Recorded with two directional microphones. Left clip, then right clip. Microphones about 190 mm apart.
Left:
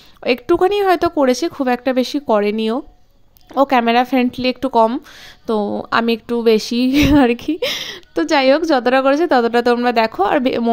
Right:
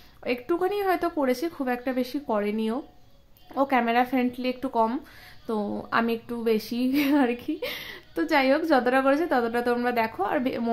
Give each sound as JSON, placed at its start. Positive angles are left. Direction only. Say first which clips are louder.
{"t": 0.2, "sound": "speech", "louder": "left 12 dB", "side_deg": 50}